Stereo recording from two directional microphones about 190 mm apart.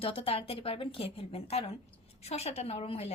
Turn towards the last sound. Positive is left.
turn(degrees=30)  # may be behind; listen again after turning